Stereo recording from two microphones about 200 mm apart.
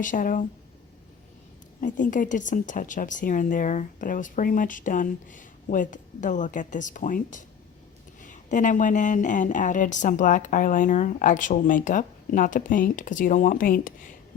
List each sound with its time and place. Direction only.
0.0 s a woman's voice: 40° left (ahead or behind)
1.8 s a woman's voice: 40° left (ahead or behind)